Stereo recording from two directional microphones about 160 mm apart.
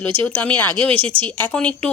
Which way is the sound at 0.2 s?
10° left (ahead or behind).